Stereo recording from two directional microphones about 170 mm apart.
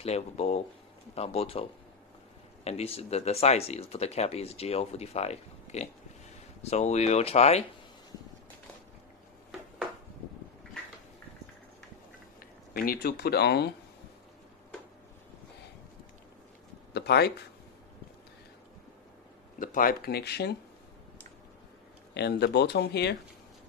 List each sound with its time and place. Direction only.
0.0 s speech: 40° left (ahead or behind)
12.4 s speech: 60° left (ahead or behind); by 13.7 s 75° left (ahead or behind)
16.9 s a sound: 75° left (ahead or behind)
19.6 s speech: 55° left (ahead or behind); by 20.5 s 75° left (ahead or behind)
22.1 s speech: 75° left (ahead or behind)